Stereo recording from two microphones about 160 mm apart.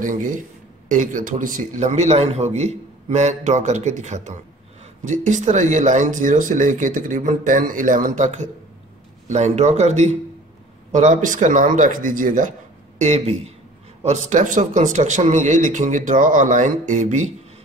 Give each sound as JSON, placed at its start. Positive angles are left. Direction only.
{"t": 0.0, "sound": "a man's voice", "side_deg": -55}
{"t": 13.0, "sound": "a man's voice", "side_deg": -45}